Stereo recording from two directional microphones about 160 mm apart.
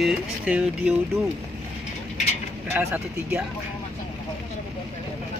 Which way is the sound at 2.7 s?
10° right (ahead or behind).